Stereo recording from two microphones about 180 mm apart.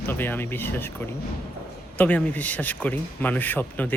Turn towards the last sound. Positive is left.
turn(degrees=10)  # may be behind; listen again after turning